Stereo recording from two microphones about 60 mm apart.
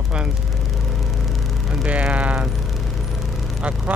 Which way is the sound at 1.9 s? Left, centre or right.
Right.